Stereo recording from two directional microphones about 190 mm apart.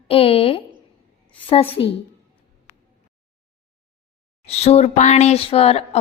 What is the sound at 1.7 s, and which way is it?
Speech, 30° left (ahead or behind).